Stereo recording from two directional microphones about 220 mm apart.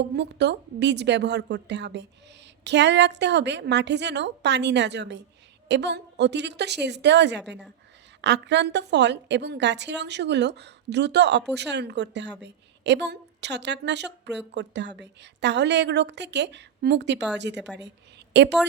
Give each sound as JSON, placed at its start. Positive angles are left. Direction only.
{"t": 0.0, "sound": "a woman's voice", "side_deg": -50}